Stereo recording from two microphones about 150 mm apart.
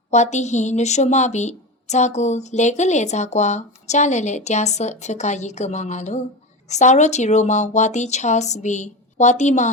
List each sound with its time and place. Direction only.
0.1 s a woman's voice: 50° left (ahead or behind)